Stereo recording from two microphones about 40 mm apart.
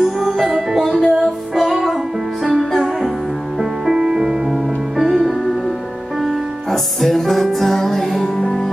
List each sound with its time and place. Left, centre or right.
0.0 s music: centre
3.8 s music: centre
8.4 s music: centre